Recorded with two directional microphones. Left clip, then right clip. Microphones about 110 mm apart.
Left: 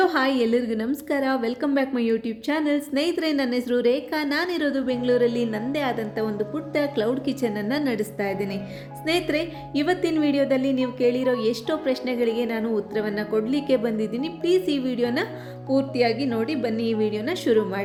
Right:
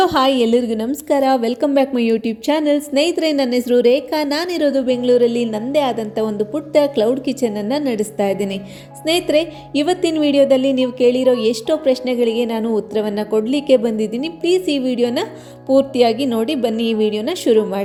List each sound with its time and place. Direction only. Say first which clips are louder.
0.0 s a woman's voice: right 7 dB; 40° right (ahead or behind)
8.2 s a woman's voice: right 11 dB; 45° right (ahead or behind)
9.0 s a woman's voice: right 8 dB; 35° right (ahead or behind)
16.0 s a woman's voice: right 7 dB; 45° right (ahead or behind)